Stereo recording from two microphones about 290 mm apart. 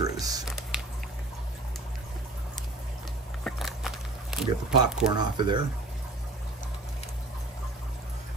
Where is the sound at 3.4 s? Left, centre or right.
Centre.